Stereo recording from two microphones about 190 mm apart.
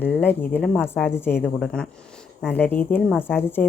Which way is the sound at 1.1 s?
10° left (ahead or behind).